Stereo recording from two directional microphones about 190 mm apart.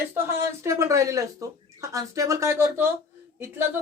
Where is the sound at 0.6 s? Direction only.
15° right (ahead or behind).